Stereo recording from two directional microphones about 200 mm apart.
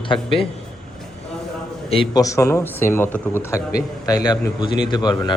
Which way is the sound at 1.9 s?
20° left (ahead or behind).